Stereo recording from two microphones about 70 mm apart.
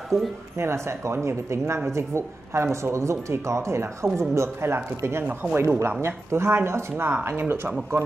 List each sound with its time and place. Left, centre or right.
0.1 s speech: right
5.2 s speech: right
5.6 s speech: right